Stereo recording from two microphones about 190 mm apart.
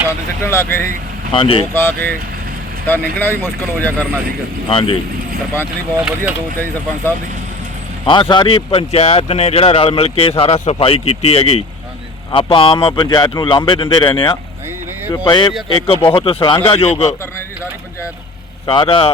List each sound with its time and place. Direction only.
0.4 s speech: 10° left (ahead or behind)
1.3 s speech: 25° left (ahead or behind)
1.7 s speech: 10° left (ahead or behind)
4.7 s speech: 25° left (ahead or behind)
6.0 s speech: 5° right (ahead or behind)
8.0 s speech: 25° left (ahead or behind)
18.6 s speech: 25° left (ahead or behind)